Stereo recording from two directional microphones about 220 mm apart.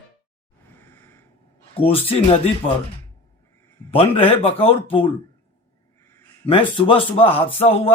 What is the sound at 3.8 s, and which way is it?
Speech, 25° left (ahead or behind).